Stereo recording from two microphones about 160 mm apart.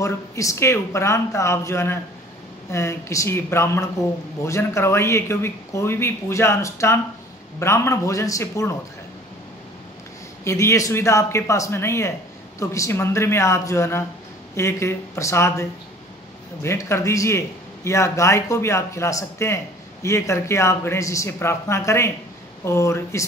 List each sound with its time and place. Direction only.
0.0 s a man's voice: 20° left (ahead or behind)
10.4 s a man's voice: 20° left (ahead or behind)
16.6 s a man's voice: 15° left (ahead or behind)